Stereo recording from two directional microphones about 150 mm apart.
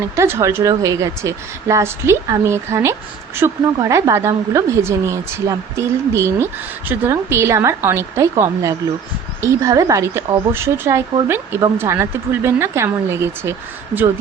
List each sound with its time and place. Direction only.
0.2 s speech: 20° right (ahead or behind)